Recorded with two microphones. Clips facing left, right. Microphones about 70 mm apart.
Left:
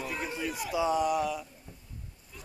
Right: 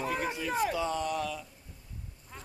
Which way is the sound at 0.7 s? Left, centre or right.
Centre.